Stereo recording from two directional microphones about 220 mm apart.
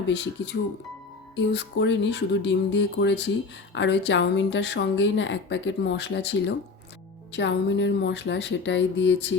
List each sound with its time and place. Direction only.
1.4 s a woman's voice: 55° left (ahead or behind)